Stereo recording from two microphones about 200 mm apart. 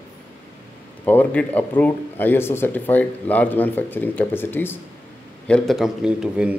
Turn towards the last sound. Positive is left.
turn(degrees=-5)  # may be behind; listen again after turning